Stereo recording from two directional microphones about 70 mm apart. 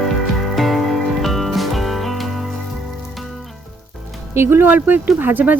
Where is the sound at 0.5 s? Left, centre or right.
Centre.